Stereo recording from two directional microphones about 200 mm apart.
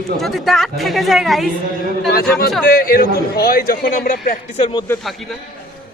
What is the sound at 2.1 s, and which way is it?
A man's voice, 50° left (ahead or behind).